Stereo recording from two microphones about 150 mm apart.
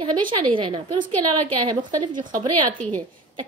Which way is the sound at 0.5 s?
35° right (ahead or behind).